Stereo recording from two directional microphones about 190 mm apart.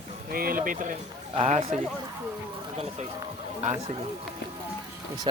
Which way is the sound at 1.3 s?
30° right (ahead or behind).